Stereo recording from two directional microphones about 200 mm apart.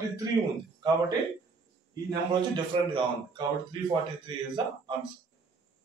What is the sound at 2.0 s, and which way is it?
A man's voice, 20° right (ahead or behind).